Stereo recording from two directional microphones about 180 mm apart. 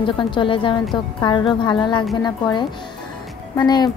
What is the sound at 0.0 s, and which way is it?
A woman's voice, 25° left (ahead or behind).